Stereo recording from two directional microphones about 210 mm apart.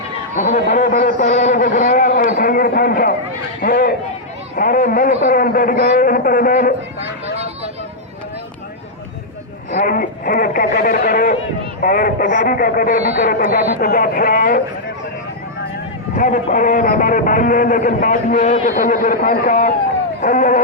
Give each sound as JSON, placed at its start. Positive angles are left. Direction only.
{"t": 0.3, "sound": "a man's voice", "side_deg": 35}
{"t": 0.6, "sound": "a sound", "side_deg": 40}
{"t": 2.4, "sound": "a man's voice", "side_deg": 40}
{"t": 7.3, "sound": "vehicle", "side_deg": -30}
{"t": 9.7, "sound": "a man's voice", "side_deg": 40}
{"t": 16.1, "sound": "a man's voice", "side_deg": 40}